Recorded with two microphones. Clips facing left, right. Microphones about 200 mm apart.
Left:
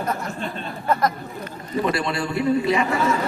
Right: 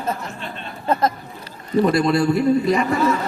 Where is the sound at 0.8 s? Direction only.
25° right (ahead or behind).